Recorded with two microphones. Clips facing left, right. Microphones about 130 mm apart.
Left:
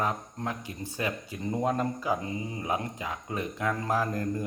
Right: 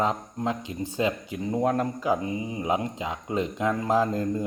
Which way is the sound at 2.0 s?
20° right (ahead or behind).